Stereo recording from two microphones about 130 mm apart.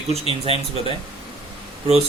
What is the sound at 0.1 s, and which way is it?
Speech, 50° right (ahead or behind).